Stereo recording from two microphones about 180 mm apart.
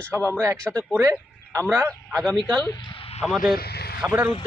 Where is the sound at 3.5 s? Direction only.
60° left (ahead or behind).